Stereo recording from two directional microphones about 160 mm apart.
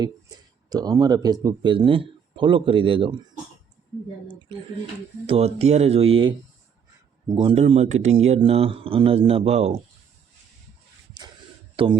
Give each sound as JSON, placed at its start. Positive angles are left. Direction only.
{"t": 0.0, "sound": "speech", "side_deg": -25}
{"t": 5.2, "sound": "speech", "side_deg": -40}
{"t": 7.5, "sound": "speech", "side_deg": -45}
{"t": 11.8, "sound": "speech", "side_deg": -35}